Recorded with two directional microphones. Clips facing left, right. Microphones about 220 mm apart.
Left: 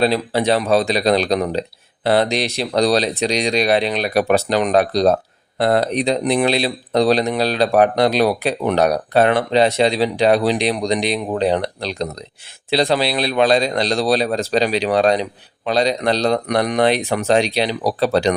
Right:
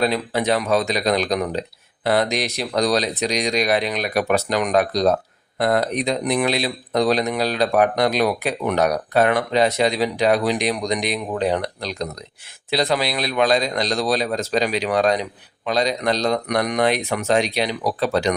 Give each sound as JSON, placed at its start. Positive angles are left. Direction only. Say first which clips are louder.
{"t": 0.0, "sound": "a man's voice", "louder": "left 3 dB", "side_deg": 30}